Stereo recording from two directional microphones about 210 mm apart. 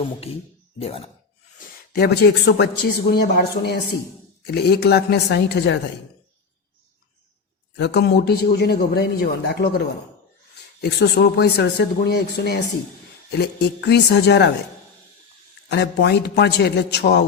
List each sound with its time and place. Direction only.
0.8 s speech: 30° left (ahead or behind)
1.5 s speech: 50° left (ahead or behind)
7.8 s speech: 50° left (ahead or behind)
15.7 s speech: 55° left (ahead or behind)